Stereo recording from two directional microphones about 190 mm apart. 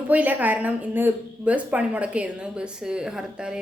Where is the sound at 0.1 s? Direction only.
10° right (ahead or behind).